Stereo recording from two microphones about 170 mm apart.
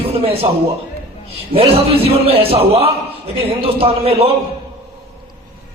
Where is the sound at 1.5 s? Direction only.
35° right (ahead or behind).